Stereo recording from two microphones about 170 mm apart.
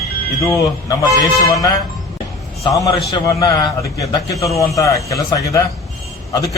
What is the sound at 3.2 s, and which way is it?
A man's voice, 20° left (ahead or behind).